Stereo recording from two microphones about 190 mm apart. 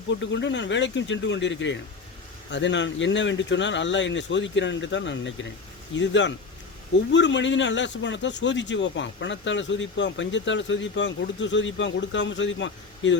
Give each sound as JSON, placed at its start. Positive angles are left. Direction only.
{"t": 0.1, "sound": "speech", "side_deg": 70}